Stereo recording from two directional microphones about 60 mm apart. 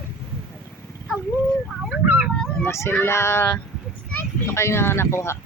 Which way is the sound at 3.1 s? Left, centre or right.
Left.